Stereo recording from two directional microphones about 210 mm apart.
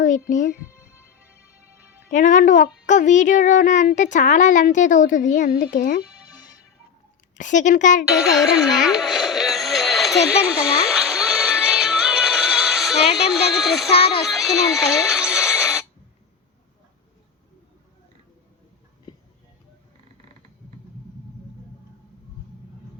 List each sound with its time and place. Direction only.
0.0 s speech: 35° left (ahead or behind)
0.8 s music: 10° right (ahead or behind)
2.1 s speech: 35° left (ahead or behind)
6.0 s music: 5° right (ahead or behind)
7.3 s speech: 35° left (ahead or behind)
8.1 s music: centre (ahead or behind)
13.9 s music: 25° left (ahead or behind)
14.3 s music: centre (ahead or behind)